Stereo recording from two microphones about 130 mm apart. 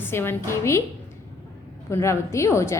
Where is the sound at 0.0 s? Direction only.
20° left (ahead or behind).